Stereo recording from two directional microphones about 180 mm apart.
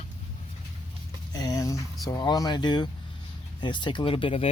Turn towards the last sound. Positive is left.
turn(degrees=30)  # may be behind; listen again after turning